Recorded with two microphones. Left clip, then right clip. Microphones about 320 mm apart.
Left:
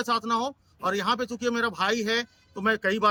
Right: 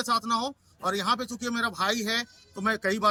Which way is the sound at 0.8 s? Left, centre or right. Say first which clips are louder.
Left 1 dB; centre.